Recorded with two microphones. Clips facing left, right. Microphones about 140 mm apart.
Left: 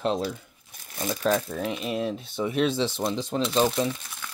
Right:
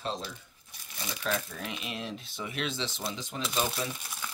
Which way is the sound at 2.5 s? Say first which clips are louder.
Left 10 dB; centre (ahead or behind).